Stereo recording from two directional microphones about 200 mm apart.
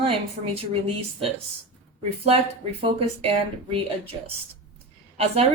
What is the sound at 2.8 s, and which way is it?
Speech, 30° right (ahead or behind).